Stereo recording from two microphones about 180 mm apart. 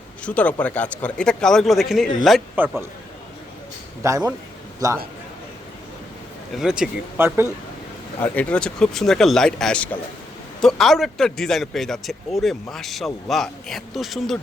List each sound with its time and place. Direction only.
0.2 s speech: 5° left (ahead or behind)
4.0 s a man's voice: 15° right (ahead or behind)
6.6 s speech: 5° right (ahead or behind)
8.2 s speech: 10° left (ahead or behind)